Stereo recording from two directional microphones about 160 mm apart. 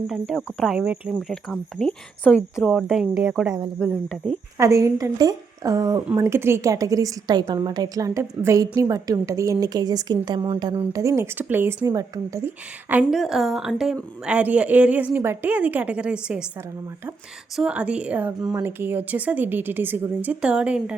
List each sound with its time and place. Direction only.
0.6 s speech: 5° right (ahead or behind)
1.3 s a woman's voice: 5° left (ahead or behind)
2.6 s a woman's voice: centre (ahead or behind)
4.5 s a woman's voice: 20° right (ahead or behind)
17.6 s speech: 5° right (ahead or behind)